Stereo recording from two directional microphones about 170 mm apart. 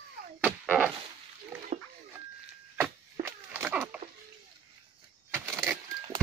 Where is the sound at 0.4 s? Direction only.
10° right (ahead or behind).